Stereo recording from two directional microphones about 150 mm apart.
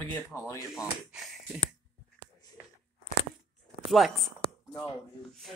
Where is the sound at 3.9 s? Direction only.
Centre (ahead or behind).